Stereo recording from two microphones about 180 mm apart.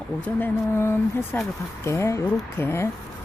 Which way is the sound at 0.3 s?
10° left (ahead or behind).